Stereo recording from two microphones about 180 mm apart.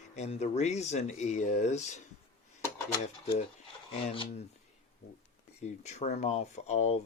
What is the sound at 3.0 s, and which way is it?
Speech, 40° left (ahead or behind).